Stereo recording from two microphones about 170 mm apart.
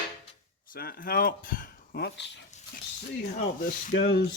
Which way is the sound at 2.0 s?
90° left.